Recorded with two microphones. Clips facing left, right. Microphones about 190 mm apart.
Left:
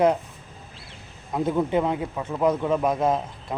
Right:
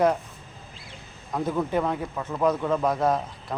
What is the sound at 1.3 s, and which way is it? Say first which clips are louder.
Speech: left 3 dB; 20° left (ahead or behind).